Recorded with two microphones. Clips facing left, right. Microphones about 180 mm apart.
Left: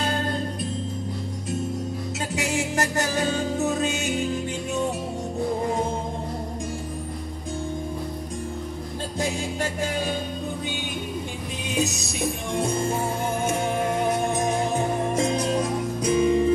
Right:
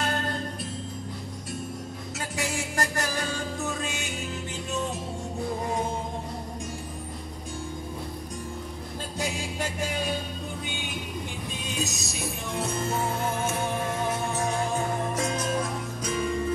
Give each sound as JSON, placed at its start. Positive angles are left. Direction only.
{"t": 0.0, "sound": "music", "side_deg": 15}
{"t": 2.7, "sound": "music", "side_deg": 20}
{"t": 12.5, "sound": "music", "side_deg": 15}
{"t": 14.3, "sound": "music", "side_deg": 15}